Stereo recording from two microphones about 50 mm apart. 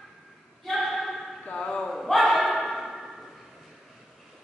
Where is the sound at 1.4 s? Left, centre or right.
Centre.